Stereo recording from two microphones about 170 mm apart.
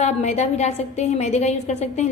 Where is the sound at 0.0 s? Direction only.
40° left (ahead or behind).